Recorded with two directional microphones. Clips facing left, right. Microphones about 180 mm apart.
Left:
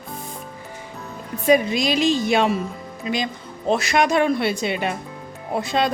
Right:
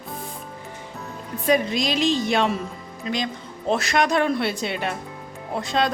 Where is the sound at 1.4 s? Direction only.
5° left (ahead or behind).